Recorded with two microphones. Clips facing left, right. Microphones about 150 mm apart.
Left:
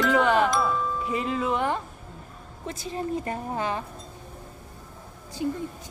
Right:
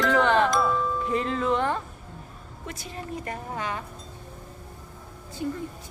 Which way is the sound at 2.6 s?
25° left (ahead or behind).